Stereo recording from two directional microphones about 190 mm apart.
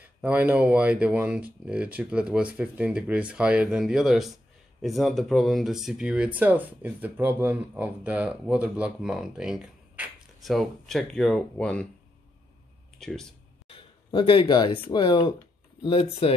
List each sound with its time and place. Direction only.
0.0 s speech: 5° right (ahead or behind)
13.0 s speech: 5° left (ahead or behind)
13.7 s speech: 30° left (ahead or behind)